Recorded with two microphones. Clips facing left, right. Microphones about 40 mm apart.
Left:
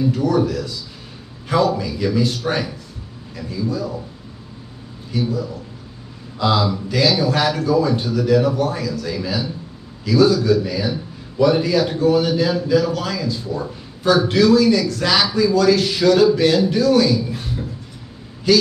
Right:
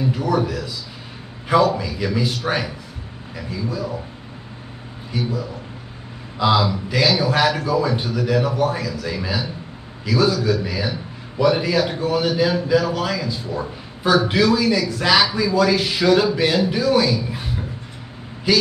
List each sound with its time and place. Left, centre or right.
0.0 s a man's voice: centre
5.1 s a man's voice: centre